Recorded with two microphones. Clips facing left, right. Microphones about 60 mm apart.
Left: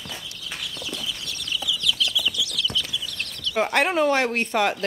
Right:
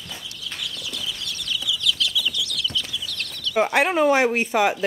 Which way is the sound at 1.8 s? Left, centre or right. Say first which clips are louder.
Even; centre.